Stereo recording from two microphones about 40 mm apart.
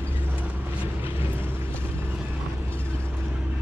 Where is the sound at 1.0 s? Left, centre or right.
Right.